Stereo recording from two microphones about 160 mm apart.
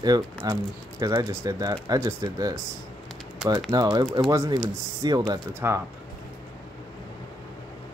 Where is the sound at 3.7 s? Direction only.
25° right (ahead or behind).